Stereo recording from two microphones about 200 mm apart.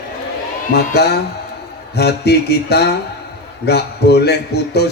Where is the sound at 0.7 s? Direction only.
55° left (ahead or behind).